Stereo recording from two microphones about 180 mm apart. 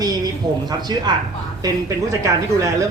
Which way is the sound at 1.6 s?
15° right (ahead or behind).